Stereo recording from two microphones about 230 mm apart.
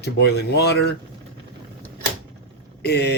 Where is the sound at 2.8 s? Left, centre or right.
Left.